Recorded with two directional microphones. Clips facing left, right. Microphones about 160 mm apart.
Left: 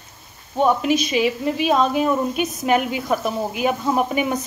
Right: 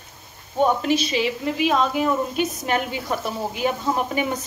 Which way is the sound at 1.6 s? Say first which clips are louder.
Left 2 dB; 20° left (ahead or behind).